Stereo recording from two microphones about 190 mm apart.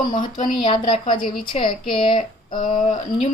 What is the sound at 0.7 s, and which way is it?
A woman's voice, 25° left (ahead or behind).